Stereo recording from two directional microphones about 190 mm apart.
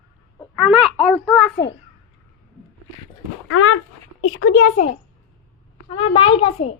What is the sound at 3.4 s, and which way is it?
A woman's voice, 90° left.